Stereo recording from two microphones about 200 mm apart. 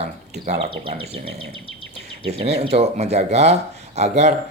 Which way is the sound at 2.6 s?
30° right (ahead or behind).